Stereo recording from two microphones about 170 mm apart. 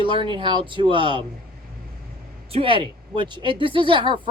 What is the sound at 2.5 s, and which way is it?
Speech, 30° right (ahead or behind).